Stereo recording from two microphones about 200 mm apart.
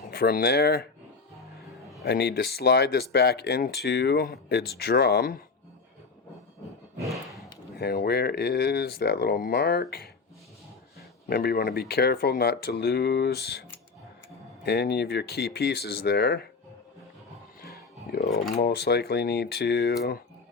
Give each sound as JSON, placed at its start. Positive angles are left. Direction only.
{"t": 0.1, "sound": "speech", "side_deg": 50}
{"t": 2.0, "sound": "speech", "side_deg": 55}
{"t": 7.1, "sound": "a sound", "side_deg": 0}
{"t": 7.8, "sound": "speech", "side_deg": 50}
{"t": 11.3, "sound": "speech", "side_deg": 50}
{"t": 18.1, "sound": "a sound", "side_deg": 50}
{"t": 18.5, "sound": "speech", "side_deg": 55}